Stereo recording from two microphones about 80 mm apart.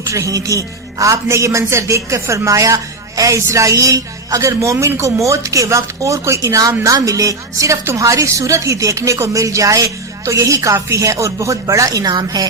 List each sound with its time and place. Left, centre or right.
0.1 s speech: right
12.1 s a woman's voice: right